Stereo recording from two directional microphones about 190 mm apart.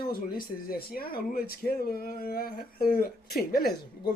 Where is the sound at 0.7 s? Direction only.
50° left (ahead or behind).